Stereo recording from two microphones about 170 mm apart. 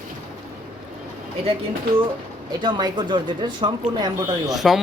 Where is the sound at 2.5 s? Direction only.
25° right (ahead or behind).